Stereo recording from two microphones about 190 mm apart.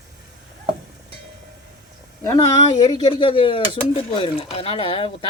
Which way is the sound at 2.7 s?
25° left (ahead or behind).